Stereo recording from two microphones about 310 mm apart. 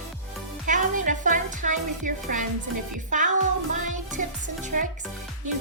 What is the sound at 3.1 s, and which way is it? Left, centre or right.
A woman's voice, right.